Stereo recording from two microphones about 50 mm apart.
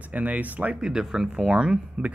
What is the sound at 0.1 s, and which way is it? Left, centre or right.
Speech, right.